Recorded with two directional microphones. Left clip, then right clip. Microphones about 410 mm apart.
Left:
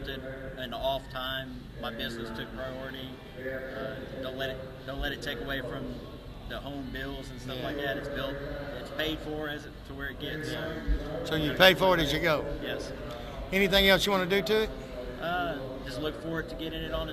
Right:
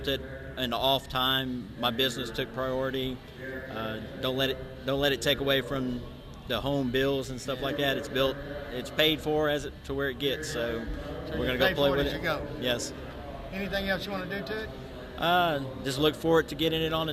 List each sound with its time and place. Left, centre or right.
0.6 s a man's voice: right
4.2 s a man's voice: right
11.3 s a man's voice: left
13.5 s a man's voice: left
15.2 s a man's voice: right